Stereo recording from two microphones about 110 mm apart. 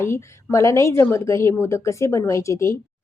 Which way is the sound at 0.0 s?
25° left (ahead or behind).